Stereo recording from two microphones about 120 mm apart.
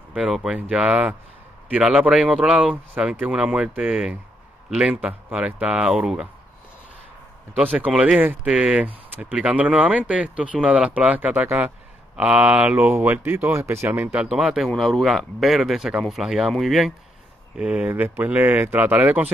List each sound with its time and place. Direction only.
0.1 s speech: 5° right (ahead or behind)
7.6 s speech: 15° right (ahead or behind)
14.2 s speech: 5° right (ahead or behind)